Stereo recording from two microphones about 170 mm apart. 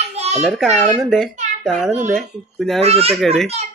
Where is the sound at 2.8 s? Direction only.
35° right (ahead or behind).